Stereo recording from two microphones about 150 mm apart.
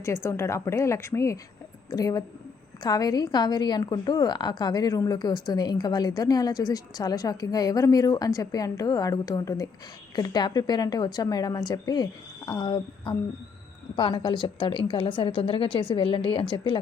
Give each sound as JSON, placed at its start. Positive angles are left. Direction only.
{"t": 0.0, "sound": "a woman's voice", "side_deg": 20}